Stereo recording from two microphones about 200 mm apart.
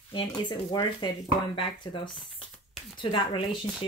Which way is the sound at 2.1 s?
Centre (ahead or behind).